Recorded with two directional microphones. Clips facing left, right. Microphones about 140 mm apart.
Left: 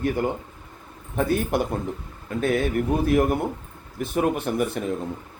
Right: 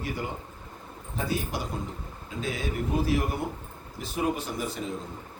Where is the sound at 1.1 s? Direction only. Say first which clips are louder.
Left 8 dB; 55° left (ahead or behind).